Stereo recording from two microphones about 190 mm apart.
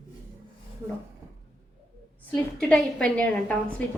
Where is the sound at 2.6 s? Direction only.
5° left (ahead or behind).